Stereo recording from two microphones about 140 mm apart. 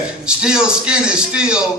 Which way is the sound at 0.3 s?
5° right (ahead or behind).